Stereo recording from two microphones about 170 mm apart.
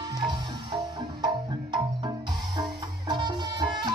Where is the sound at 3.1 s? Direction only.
25° right (ahead or behind).